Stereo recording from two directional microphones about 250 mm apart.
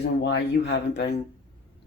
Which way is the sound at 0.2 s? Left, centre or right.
Left.